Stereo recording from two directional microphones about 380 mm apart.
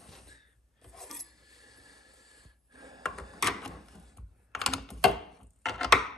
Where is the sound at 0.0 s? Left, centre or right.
Centre.